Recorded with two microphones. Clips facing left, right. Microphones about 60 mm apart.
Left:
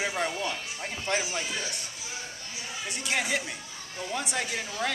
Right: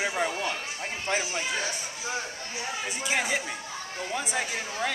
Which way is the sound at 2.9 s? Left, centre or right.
Centre.